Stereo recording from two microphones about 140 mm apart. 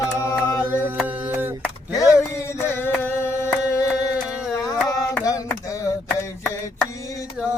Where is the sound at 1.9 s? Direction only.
20° left (ahead or behind).